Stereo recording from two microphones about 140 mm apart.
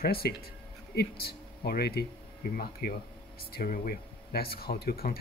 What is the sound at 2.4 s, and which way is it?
Speech, 90° left.